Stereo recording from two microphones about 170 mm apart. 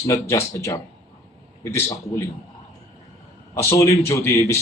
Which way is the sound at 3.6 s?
15° left (ahead or behind).